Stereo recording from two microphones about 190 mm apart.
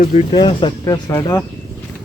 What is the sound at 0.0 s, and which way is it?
Speech, 30° left (ahead or behind).